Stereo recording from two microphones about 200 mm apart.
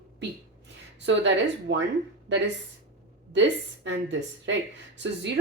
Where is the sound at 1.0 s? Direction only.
65° right (ahead or behind).